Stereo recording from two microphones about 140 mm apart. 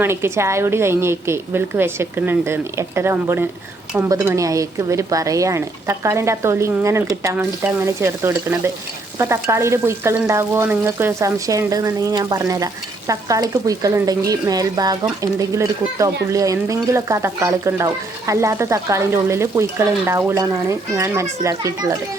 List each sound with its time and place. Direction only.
0.0 s a woman's voice: 20° right (ahead or behind)
3.9 s frying: 20° right (ahead or behind)